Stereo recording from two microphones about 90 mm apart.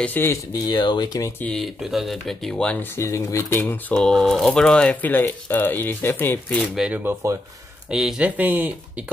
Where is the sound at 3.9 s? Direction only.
5° left (ahead or behind); by 6.5 s 20° left (ahead or behind).